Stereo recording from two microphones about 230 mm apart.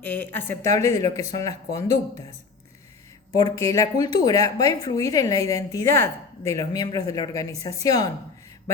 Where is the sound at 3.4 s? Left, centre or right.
Centre.